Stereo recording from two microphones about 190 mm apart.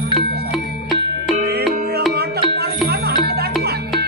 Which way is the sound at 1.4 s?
55° right (ahead or behind).